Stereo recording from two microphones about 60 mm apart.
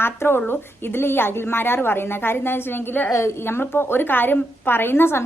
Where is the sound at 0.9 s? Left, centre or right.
Left.